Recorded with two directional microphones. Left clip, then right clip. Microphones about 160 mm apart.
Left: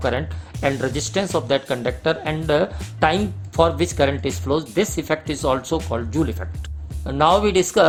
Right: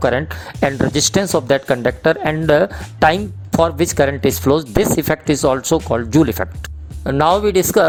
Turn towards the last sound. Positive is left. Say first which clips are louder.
# right 3 dB
turn(degrees=-50)  # may be behind; listen again after turning